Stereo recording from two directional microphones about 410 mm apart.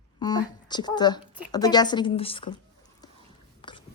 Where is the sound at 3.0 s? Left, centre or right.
Centre.